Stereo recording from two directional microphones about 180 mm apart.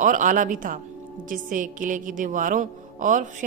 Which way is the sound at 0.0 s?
45° right (ahead or behind).